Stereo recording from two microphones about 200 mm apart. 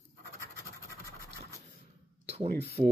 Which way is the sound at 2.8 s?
30° right (ahead or behind).